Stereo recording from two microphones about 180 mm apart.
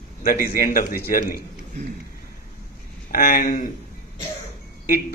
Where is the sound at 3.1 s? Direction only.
55° left (ahead or behind).